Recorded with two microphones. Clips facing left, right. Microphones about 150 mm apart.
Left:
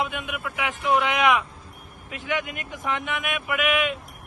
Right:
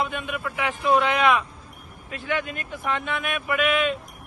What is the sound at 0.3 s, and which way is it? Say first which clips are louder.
A man's voice: right 2 dB; 5° left (ahead or behind).